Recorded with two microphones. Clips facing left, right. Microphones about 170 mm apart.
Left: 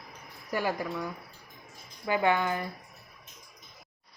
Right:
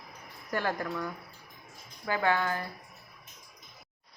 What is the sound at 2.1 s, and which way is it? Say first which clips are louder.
Speech: left 2 dB; 15° left (ahead or behind).